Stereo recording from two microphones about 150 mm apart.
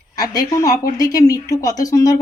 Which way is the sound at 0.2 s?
25° left (ahead or behind).